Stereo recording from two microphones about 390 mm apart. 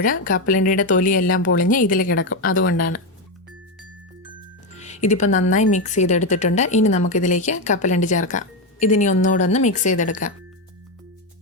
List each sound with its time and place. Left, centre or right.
0.0 s a woman's voice: left
4.8 s music: centre
5.5 s a woman's voice: centre